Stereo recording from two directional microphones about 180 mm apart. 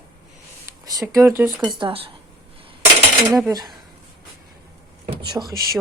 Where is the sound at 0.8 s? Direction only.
20° right (ahead or behind).